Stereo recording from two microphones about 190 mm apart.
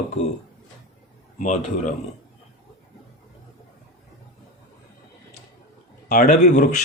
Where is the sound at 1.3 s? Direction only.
40° left (ahead or behind).